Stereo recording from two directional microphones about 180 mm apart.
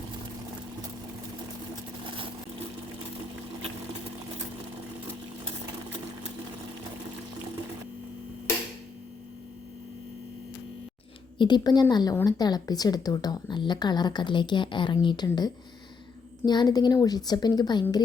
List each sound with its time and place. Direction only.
2.0 s vehicle: 30° right (ahead or behind)
11.3 s a woman's voice: 25° left (ahead or behind)